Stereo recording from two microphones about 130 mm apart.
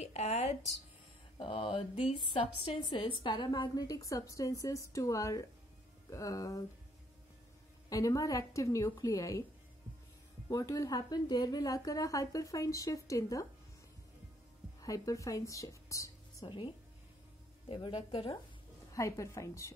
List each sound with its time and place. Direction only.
0.0 s speech: 55° left (ahead or behind)
1.4 s mantra: 45° left (ahead or behind)
2.1 s a woman's voice: 45° left (ahead or behind); by 6.6 s 30° left (ahead or behind)
7.9 s a woman's voice: 25° left (ahead or behind)
10.5 s a woman's voice: 25° left (ahead or behind)
14.8 s speech: 25° left (ahead or behind)
16.4 s speech: 40° left (ahead or behind)
18.9 s a woman's voice: 25° left (ahead or behind)